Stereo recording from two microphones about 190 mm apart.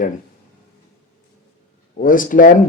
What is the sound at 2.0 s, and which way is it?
Speech, 45° left (ahead or behind).